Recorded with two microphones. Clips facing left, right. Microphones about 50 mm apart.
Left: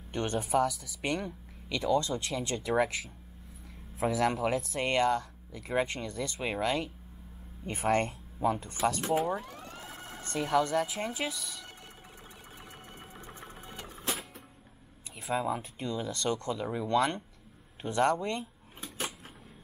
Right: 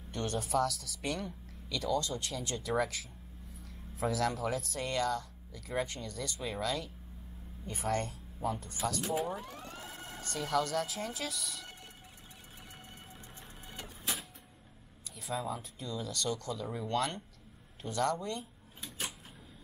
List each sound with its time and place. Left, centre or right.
0.1 s speech: left
7.6 s speech: left
10.2 s speech: left
13.1 s a sound: left
15.0 s speech: left